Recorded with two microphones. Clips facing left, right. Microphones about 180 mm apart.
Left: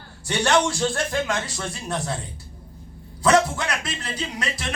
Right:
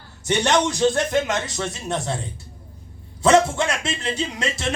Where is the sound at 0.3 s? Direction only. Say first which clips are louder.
Right 1 dB; 20° right (ahead or behind).